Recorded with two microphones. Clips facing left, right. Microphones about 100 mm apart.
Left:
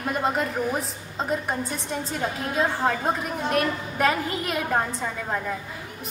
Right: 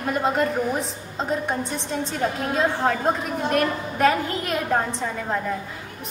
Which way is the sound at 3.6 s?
5° left (ahead or behind).